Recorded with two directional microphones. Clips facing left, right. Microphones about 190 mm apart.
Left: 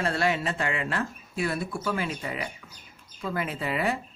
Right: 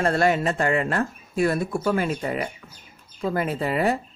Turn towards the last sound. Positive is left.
turn(degrees=-40)  # may be behind; listen again after turning